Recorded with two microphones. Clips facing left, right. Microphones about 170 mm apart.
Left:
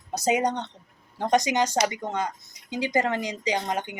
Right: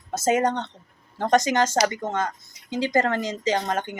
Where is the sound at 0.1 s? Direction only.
15° left (ahead or behind).